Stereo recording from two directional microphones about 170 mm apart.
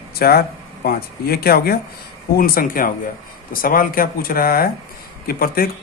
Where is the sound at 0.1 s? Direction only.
65° left (ahead or behind).